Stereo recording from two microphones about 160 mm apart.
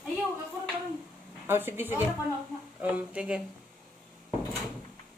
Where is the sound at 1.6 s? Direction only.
15° right (ahead or behind).